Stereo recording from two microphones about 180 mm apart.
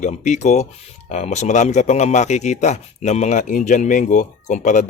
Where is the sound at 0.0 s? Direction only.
40° left (ahead or behind).